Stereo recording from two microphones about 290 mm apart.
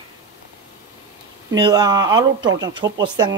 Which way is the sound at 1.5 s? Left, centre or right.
Centre.